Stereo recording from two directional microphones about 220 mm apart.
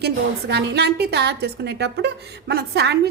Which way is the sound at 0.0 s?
50° right (ahead or behind).